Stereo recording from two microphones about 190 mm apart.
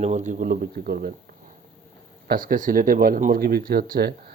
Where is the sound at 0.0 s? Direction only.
40° right (ahead or behind); by 1.1 s 55° right (ahead or behind).